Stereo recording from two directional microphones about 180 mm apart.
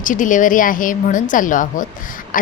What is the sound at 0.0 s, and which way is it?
A woman's voice, 45° left (ahead or behind).